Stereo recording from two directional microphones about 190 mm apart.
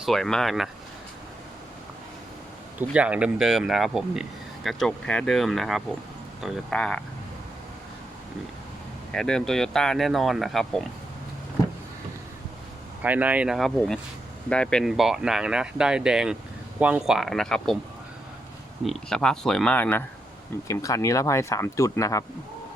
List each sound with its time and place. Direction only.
0.0 s speech: centre (ahead or behind)
2.9 s speech: 5° right (ahead or behind)
9.1 s speech: 5° left (ahead or behind)
13.0 s speech: 10° right (ahead or behind)
18.9 s speech: centre (ahead or behind); by 22.2 s 15° left (ahead or behind)